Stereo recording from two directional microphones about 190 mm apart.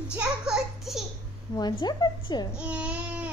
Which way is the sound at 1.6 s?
20° left (ahead or behind).